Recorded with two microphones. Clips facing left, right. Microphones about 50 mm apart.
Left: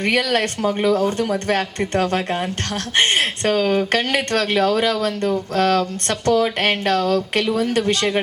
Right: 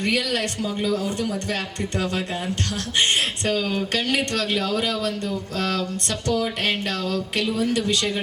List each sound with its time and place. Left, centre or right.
0.0 s speech: left